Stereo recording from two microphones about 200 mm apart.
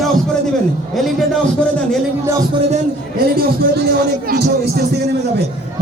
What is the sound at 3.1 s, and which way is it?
A man's voice, 50° right (ahead or behind).